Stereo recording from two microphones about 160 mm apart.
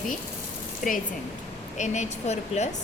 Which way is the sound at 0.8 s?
55° left (ahead or behind).